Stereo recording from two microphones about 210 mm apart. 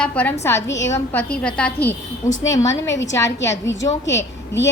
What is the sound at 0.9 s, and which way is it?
A woman's voice, 10° left (ahead or behind).